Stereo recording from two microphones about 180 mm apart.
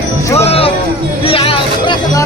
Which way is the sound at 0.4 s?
35° left (ahead or behind).